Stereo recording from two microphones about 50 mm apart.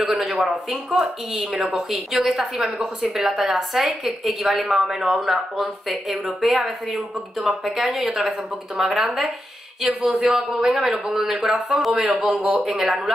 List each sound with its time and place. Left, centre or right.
0.0 s speech: centre